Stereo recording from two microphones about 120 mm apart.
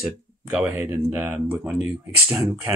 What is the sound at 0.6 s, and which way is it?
Speech, 20° right (ahead or behind).